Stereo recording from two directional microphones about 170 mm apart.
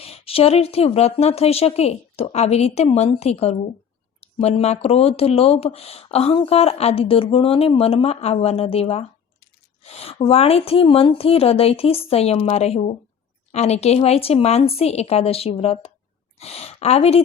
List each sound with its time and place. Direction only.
0.0 s speech: 35° left (ahead or behind)